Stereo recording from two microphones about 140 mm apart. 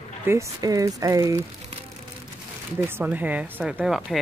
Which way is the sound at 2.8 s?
15° right (ahead or behind).